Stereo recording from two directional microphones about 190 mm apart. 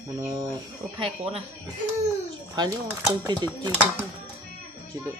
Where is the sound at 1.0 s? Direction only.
30° right (ahead or behind).